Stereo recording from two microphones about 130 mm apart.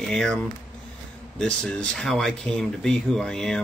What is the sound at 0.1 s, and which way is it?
Speech, 5° left (ahead or behind).